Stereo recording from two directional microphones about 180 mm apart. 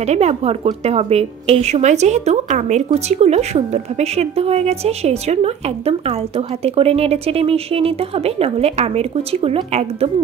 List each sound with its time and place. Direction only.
0.0 s a woman's voice: 35° right (ahead or behind)